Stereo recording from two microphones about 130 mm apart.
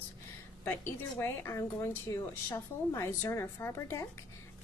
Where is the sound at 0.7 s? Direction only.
15° left (ahead or behind).